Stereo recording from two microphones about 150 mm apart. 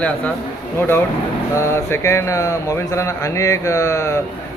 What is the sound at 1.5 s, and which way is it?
Speech, 20° left (ahead or behind).